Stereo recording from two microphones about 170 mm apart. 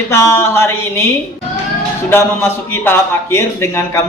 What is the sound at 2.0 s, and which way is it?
A man's voice, 15° left (ahead or behind).